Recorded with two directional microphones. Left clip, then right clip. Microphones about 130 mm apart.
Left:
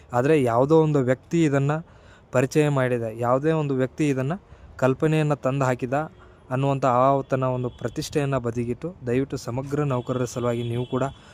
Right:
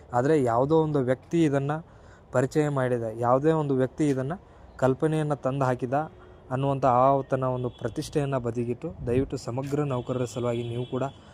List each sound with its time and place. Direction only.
0.1 s speech: 35° left (ahead or behind)